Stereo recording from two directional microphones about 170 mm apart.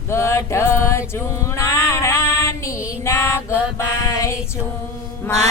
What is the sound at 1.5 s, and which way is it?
Child singing, 15° left (ahead or behind).